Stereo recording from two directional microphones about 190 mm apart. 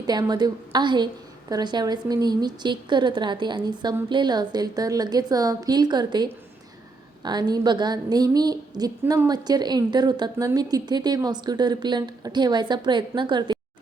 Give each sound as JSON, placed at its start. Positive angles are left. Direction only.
{"t": 0.0, "sound": "a woman's voice", "side_deg": -20}
{"t": 7.3, "sound": "a woman's voice", "side_deg": -20}